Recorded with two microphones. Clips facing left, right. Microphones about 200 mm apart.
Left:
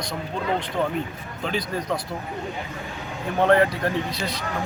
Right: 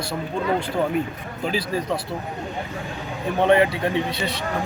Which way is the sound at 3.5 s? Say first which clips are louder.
Right 1 dB; 25° right (ahead or behind).